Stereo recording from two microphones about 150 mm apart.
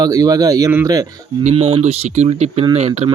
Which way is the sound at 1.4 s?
40° right (ahead or behind).